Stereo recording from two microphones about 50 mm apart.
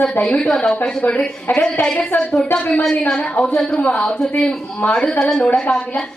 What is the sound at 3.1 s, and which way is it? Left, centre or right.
A woman's voice, centre.